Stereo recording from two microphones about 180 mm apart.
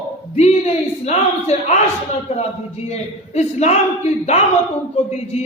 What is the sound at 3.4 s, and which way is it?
Speech, 40° left (ahead or behind).